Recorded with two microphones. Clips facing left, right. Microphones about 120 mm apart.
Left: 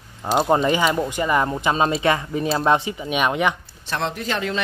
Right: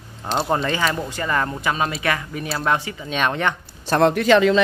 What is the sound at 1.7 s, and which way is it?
Speech, 25° left (ahead or behind).